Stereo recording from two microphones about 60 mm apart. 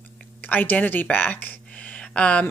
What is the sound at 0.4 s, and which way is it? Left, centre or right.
A woman's voice, left.